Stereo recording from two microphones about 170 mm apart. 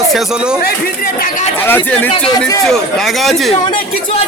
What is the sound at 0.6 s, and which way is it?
Speech, 55° left (ahead or behind).